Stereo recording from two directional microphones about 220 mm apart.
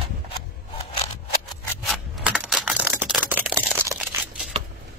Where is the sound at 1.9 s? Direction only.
Centre (ahead or behind).